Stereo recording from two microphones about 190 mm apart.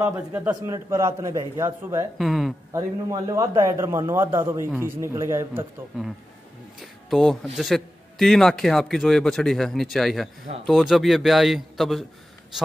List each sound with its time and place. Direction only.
0.0 s a man's voice: 10° right (ahead or behind)
2.1 s a man's voice: centre (ahead or behind)
2.7 s a man's voice: 20° right (ahead or behind)
6.8 s a man's voice: centre (ahead or behind)